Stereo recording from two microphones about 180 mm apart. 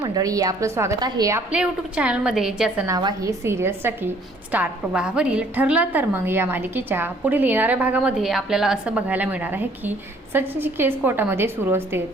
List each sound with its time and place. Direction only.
0.0 s a woman's voice: 20° right (ahead or behind); by 2.8 s 5° right (ahead or behind)
2.8 s a woman's voice: 20° right (ahead or behind)